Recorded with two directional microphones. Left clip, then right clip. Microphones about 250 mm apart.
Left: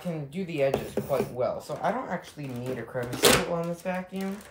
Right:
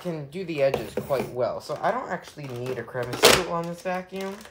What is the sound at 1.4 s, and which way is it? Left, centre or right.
Speech, right.